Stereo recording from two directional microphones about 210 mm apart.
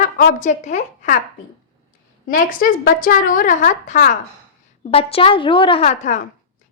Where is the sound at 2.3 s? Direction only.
40° left (ahead or behind).